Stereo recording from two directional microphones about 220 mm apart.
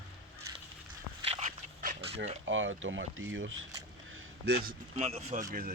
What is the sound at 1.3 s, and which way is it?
Dog, 30° right (ahead or behind).